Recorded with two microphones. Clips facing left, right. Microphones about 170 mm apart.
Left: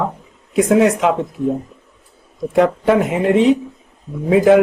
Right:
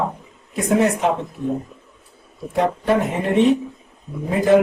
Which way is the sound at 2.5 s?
90° left.